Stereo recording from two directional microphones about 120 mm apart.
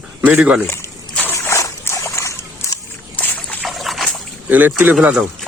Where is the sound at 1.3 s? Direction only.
25° left (ahead or behind).